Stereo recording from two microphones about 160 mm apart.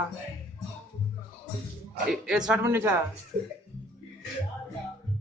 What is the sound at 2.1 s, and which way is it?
Speech, 5° right (ahead or behind).